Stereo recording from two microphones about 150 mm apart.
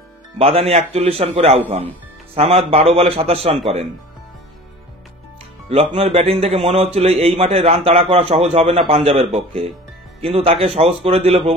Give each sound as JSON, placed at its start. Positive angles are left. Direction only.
{"t": 0.4, "sound": "a man's voice", "side_deg": -40}
{"t": 5.7, "sound": "a man's voice", "side_deg": -40}
{"t": 10.2, "sound": "a man's voice", "side_deg": -40}